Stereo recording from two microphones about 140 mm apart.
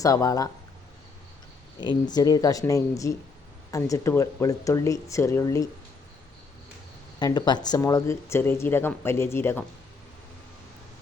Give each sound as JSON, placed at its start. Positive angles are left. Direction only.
{"t": 0.0, "sound": "speech", "side_deg": 25}
{"t": 1.8, "sound": "speech", "side_deg": 30}
{"t": 7.2, "sound": "speech", "side_deg": 30}